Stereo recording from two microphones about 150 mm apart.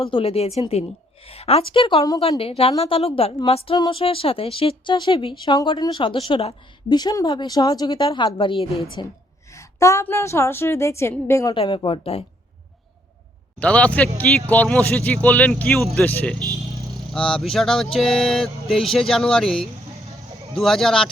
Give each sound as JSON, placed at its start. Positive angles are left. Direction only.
{"t": 0.0, "sound": "a woman's voice", "side_deg": 35}
{"t": 6.8, "sound": "a woman's voice", "side_deg": 30}
{"t": 9.5, "sound": "a woman's voice", "side_deg": 20}
{"t": 11.5, "sound": "a woman's voice", "side_deg": 35}
{"t": 13.6, "sound": "speech", "side_deg": 10}
{"t": 16.4, "sound": "vehicle", "side_deg": -20}
{"t": 16.9, "sound": "speech", "side_deg": 5}